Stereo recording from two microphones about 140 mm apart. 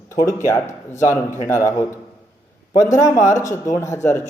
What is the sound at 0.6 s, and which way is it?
Speech, 60° left (ahead or behind).